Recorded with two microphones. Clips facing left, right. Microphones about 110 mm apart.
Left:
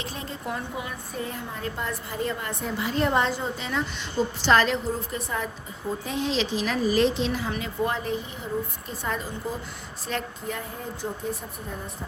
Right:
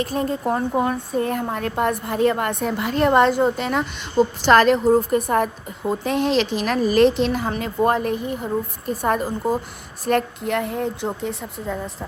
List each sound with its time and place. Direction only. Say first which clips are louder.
0.0 s speech: right 12 dB; 45° right (ahead or behind)
10.1 s a woman's voice: right 11 dB; 65° right (ahead or behind)